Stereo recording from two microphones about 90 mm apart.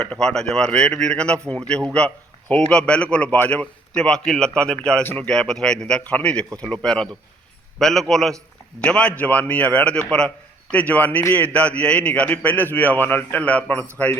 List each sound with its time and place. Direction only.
0.0 s a man's voice: 10° left (ahead or behind)